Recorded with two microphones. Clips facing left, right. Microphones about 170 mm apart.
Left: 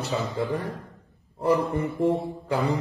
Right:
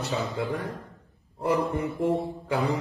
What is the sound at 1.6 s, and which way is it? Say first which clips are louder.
Mantra: left 2 dB; centre (ahead or behind).